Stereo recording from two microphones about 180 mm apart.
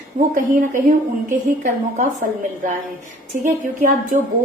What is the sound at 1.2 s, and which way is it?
Speech, 45° right (ahead or behind).